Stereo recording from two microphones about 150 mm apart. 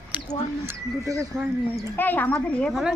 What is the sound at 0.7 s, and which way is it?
Speech, 20° right (ahead or behind).